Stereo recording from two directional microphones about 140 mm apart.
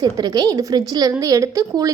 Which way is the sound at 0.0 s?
25° right (ahead or behind).